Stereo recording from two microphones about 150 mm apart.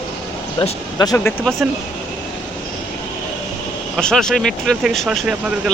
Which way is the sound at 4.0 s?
5° left (ahead or behind).